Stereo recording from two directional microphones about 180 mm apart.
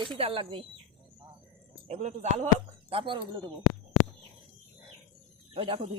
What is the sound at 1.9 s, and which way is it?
Speech, 40° right (ahead or behind).